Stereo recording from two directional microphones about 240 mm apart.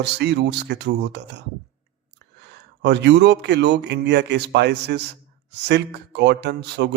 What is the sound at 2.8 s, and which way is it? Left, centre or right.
Mantra, right.